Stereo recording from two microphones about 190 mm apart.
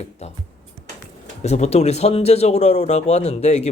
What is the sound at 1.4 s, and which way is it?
Speech, 35° left (ahead or behind).